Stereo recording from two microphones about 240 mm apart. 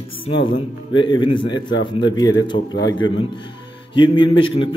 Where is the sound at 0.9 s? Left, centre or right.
Centre.